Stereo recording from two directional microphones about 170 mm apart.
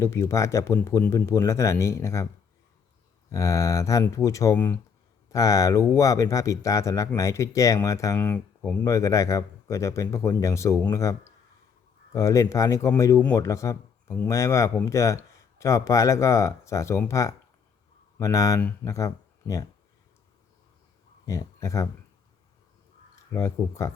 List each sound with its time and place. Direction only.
0.0 s speech: 15° left (ahead or behind)
3.3 s speech: 20° left (ahead or behind)
21.2 s speech: 20° left (ahead or behind)
23.3 s speech: 15° left (ahead or behind)